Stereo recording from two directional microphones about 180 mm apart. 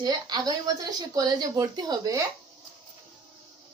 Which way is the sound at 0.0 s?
20° right (ahead or behind).